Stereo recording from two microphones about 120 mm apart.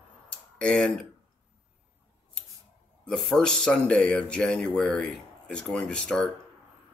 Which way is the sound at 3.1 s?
5° left (ahead or behind).